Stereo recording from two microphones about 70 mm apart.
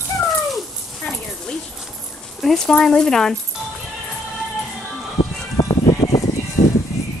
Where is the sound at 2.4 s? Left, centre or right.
Centre.